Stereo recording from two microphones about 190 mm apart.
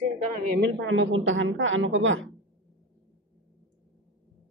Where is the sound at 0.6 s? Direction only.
70° right (ahead or behind); by 2.2 s 85° right.